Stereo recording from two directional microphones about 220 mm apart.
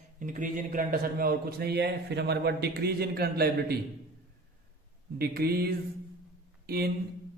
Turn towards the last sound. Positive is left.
turn(degrees=-45)  # may be behind; listen again after turning